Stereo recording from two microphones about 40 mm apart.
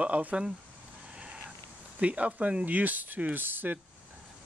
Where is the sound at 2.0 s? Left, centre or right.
Right.